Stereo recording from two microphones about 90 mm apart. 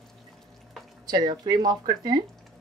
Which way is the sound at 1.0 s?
50° right (ahead or behind).